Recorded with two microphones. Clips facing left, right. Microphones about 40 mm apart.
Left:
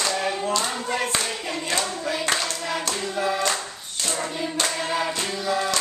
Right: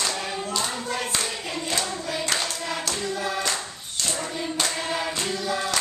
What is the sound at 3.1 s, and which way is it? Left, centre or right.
Clapping, left.